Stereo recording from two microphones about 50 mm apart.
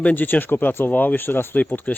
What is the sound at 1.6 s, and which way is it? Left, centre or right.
Speech, left.